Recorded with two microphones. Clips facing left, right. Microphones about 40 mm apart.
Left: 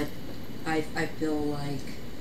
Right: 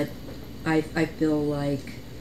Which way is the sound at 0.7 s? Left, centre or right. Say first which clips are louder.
Right 5 dB; right.